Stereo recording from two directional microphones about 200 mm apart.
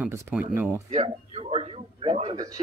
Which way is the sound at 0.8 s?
30° right (ahead or behind).